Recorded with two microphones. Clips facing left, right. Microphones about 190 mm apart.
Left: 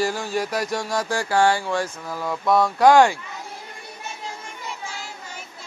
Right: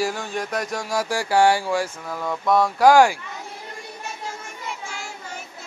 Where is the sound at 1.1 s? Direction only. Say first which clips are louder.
Right 2 dB; 15° right (ahead or behind).